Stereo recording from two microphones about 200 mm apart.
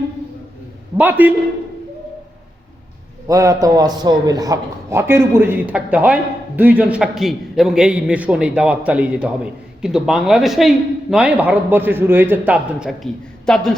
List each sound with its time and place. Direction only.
0.9 s a man's voice: 10° right (ahead or behind)
3.2 s a man's voice: 15° right (ahead or behind); by 13.7 s centre (ahead or behind)